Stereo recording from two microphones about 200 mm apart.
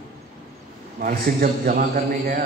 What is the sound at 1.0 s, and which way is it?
A man's voice, 45° right (ahead or behind).